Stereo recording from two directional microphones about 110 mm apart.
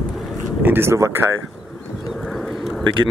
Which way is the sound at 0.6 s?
20° right (ahead or behind).